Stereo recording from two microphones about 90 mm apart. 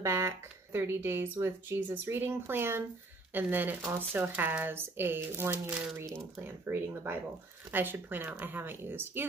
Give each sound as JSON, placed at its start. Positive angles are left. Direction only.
{"t": 0.0, "sound": "speech", "side_deg": -30}